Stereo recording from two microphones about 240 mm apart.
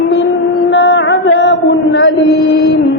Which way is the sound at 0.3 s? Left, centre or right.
Left.